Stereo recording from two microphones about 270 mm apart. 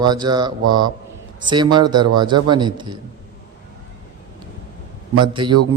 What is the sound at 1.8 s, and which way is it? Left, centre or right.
Speech, right.